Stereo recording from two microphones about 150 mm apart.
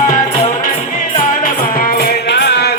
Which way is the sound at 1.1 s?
60° left (ahead or behind).